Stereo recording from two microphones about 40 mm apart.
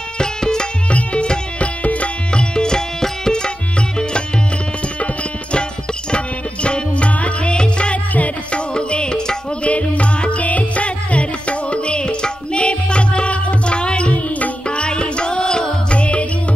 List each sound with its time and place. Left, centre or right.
0.2 s music: centre
0.8 s music: left
1.8 s music: left
2.3 s tabla: left
6.1 s music: left
9.7 s music: left; by 15.7 s centre
15.9 s music: left